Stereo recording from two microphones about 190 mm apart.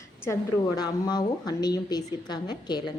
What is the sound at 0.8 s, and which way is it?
A woman's voice, 20° left (ahead or behind).